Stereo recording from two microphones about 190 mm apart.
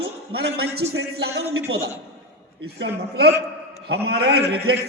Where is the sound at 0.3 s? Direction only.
60° right (ahead or behind).